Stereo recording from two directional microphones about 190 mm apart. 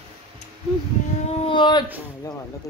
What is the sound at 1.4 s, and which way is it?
Speech, 25° left (ahead or behind).